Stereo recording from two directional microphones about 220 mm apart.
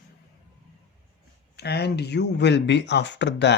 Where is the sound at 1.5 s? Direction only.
50° left (ahead or behind).